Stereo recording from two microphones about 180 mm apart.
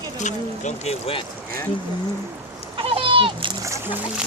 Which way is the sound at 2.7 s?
30° right (ahead or behind).